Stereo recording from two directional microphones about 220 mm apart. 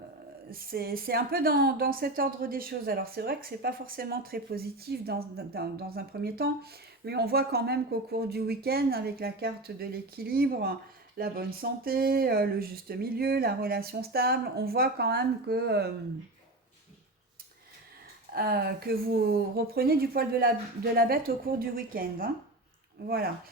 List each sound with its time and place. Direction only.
0.5 s a woman's voice: 45° right (ahead or behind)
18.3 s a woman's voice: 45° right (ahead or behind)